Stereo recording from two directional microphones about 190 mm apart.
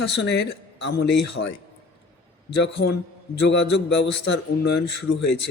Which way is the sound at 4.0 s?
70° left (ahead or behind).